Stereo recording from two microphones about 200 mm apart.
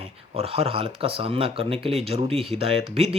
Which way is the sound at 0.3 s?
30° right (ahead or behind).